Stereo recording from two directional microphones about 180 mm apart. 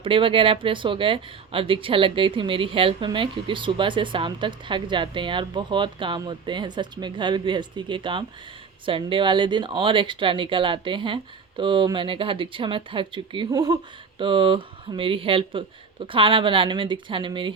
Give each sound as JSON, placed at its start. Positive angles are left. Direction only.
{"t": 0.0, "sound": "speech", "side_deg": -30}